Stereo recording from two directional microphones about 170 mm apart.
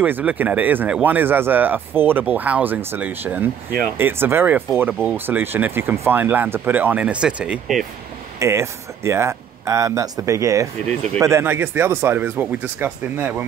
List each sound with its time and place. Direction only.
0.0 s speech: 10° right (ahead or behind)
8.4 s speech: 15° right (ahead or behind)